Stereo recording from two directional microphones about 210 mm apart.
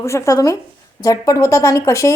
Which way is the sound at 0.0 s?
15° left (ahead or behind).